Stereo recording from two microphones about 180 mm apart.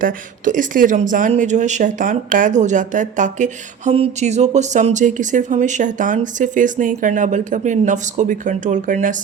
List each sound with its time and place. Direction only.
0.0 s speech: 45° right (ahead or behind)